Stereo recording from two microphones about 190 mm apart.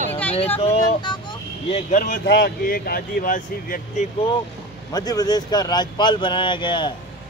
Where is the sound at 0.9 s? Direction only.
25° left (ahead or behind).